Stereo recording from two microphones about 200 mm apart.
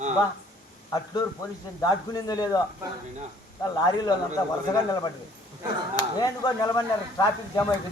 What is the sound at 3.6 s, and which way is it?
Speech, 20° left (ahead or behind).